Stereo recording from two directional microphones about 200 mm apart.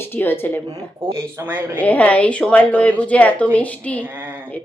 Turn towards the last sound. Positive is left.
turn(degrees=-10)  # may be behind; listen again after turning